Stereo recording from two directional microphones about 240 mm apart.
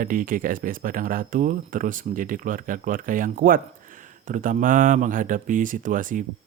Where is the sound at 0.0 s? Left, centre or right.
Right.